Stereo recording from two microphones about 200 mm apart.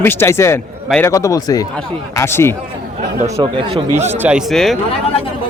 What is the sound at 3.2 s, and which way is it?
Speech, 20° right (ahead or behind).